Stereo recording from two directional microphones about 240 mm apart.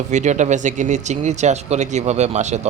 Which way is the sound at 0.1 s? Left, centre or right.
Right.